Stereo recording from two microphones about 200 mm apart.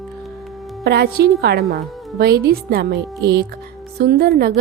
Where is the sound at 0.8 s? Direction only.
55° right (ahead or behind).